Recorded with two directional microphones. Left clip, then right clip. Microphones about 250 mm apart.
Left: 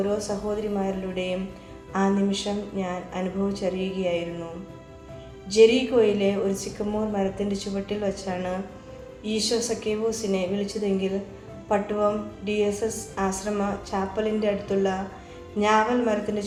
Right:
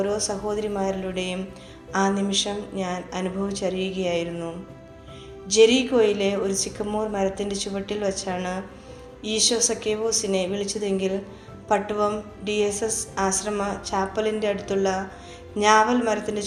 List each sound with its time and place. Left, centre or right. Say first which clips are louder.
0.0 s a woman's voice: right 1 dB; right
5.5 s a woman's voice: even; right